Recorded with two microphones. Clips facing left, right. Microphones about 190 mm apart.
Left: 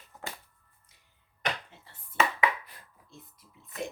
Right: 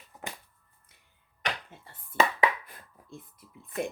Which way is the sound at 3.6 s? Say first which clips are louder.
Right 5 dB; 50° right (ahead or behind).